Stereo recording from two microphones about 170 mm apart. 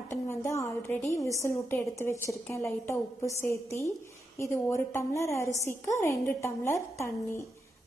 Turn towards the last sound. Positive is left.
turn(degrees=15)  # may be behind; listen again after turning